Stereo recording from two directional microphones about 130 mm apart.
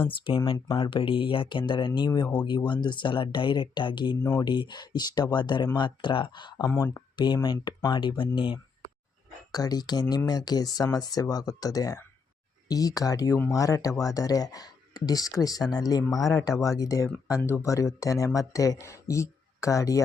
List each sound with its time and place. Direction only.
0.1 s speech: 40° left (ahead or behind)
4.2 s speech: 20° left (ahead or behind)
4.4 s speech: 35° left (ahead or behind)
6.7 s speech: 20° left (ahead or behind)
7.4 s speech: 35° left (ahead or behind)